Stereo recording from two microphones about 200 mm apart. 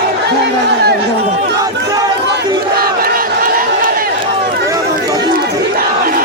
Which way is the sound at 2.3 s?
50° right (ahead or behind).